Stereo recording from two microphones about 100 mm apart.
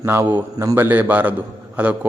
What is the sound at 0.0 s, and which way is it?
A man's voice, 25° right (ahead or behind).